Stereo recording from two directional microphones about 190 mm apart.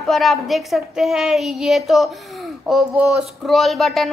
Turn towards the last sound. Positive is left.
turn(degrees=0)  # may be behind; listen again after turning